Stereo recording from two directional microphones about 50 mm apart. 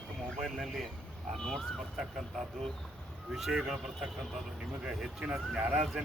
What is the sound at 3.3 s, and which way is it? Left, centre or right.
Speech, centre.